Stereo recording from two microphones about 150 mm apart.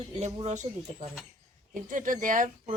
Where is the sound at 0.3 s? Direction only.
50° right (ahead or behind).